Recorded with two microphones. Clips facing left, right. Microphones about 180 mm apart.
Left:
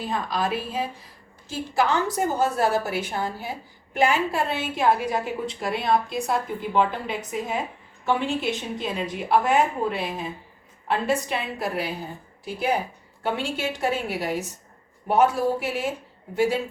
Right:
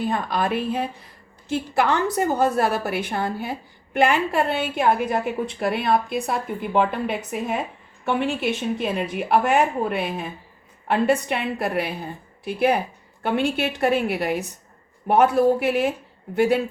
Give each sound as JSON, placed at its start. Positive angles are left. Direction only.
{"t": 0.0, "sound": "a woman's voice", "side_deg": -55}